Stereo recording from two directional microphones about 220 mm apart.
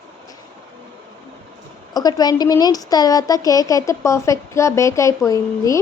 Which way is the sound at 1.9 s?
15° left (ahead or behind).